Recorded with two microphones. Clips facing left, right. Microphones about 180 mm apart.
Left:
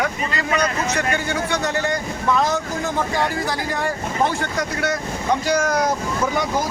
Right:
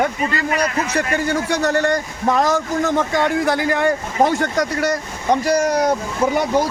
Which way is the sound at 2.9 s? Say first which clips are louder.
Right 3 dB; 60° right (ahead or behind).